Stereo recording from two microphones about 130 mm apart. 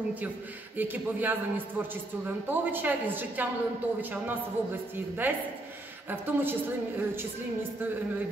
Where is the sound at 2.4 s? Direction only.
15° right (ahead or behind).